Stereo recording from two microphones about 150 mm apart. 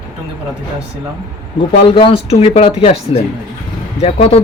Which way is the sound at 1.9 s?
40° left (ahead or behind).